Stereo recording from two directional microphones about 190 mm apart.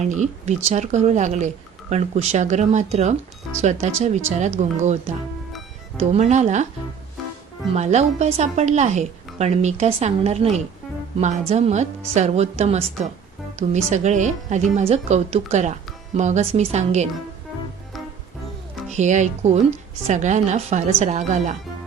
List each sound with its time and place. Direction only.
0.0 s a woman's voice: 40° right (ahead or behind)
7.7 s a woman's voice: 35° right (ahead or behind)
18.9 s a woman's voice: 40° right (ahead or behind)